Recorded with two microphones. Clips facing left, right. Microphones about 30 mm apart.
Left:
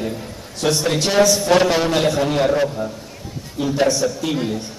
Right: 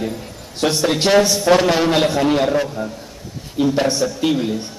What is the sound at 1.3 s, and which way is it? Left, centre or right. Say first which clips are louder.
A man's voice: right 1 dB; centre.